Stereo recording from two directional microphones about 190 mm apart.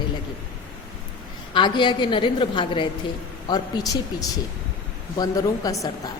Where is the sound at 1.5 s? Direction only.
25° left (ahead or behind).